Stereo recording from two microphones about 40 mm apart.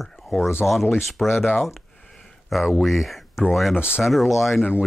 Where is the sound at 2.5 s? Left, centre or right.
Centre.